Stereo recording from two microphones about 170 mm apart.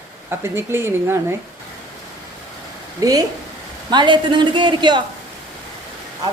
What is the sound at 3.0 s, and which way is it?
Speech, 20° right (ahead or behind).